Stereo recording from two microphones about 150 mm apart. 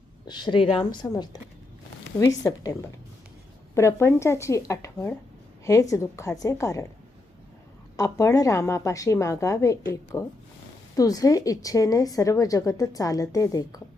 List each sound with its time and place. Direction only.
0.3 s a woman's voice: 30° left (ahead or behind)
3.8 s a woman's voice: 15° left (ahead or behind)
7.9 s a woman's voice: 20° left (ahead or behind)